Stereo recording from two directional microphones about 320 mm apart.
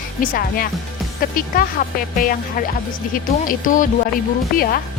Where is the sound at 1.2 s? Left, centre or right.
Left.